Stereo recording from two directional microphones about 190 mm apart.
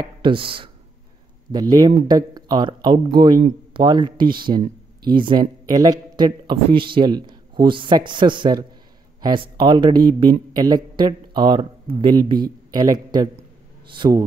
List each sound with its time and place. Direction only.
0.0 s a man's voice: 25° right (ahead or behind)